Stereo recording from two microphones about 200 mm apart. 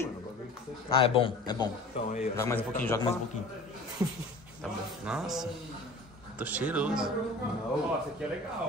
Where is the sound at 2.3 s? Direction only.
10° left (ahead or behind).